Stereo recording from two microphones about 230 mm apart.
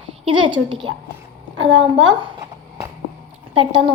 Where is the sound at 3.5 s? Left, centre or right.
Right.